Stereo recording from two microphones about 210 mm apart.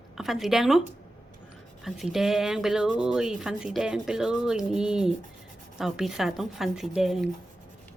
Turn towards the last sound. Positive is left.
turn(degrees=0)  # may be behind; listen again after turning